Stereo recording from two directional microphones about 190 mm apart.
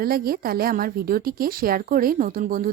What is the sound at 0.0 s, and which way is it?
A woman's voice, 50° right (ahead or behind).